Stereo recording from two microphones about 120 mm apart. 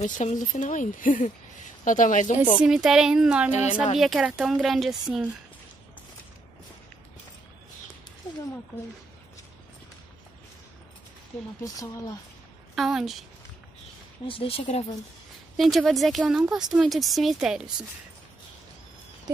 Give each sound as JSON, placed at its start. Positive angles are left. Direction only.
{"t": 0.0, "sound": "speech", "side_deg": 85}
{"t": 2.6, "sound": "speech", "side_deg": -5}
{"t": 11.6, "sound": "speech", "side_deg": 30}
{"t": 12.7, "sound": "speech", "side_deg": 0}
{"t": 14.2, "sound": "speech", "side_deg": 50}
{"t": 15.5, "sound": "speech", "side_deg": 0}